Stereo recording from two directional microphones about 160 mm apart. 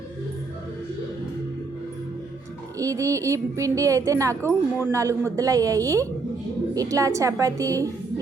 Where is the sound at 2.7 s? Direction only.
20° right (ahead or behind).